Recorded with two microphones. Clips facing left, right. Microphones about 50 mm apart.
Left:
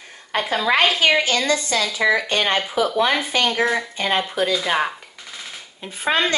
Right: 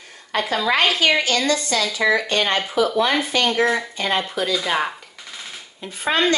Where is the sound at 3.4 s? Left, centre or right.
Centre.